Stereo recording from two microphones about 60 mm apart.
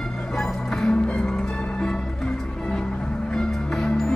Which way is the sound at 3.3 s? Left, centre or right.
Centre.